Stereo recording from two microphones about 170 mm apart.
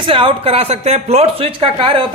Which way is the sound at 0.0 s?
30° right (ahead or behind).